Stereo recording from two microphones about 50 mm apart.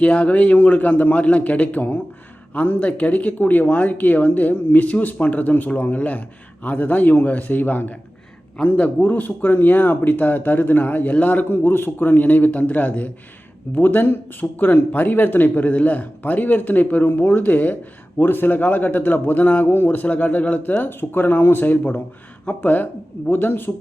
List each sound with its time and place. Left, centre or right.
0.0 s speech: left
9.0 s speech: left